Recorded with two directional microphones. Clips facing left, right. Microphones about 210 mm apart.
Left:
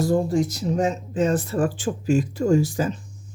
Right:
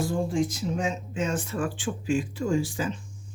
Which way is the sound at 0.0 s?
40° left (ahead or behind).